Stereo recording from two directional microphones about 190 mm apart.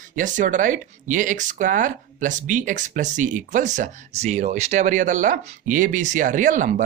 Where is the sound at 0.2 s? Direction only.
45° right (ahead or behind).